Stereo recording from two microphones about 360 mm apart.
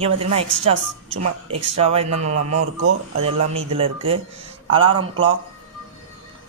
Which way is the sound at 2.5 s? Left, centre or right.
Right.